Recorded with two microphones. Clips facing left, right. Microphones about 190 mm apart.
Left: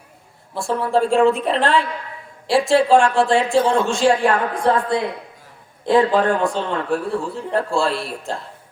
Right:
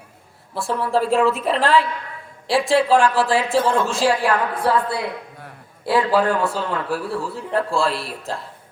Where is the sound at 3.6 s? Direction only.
25° left (ahead or behind).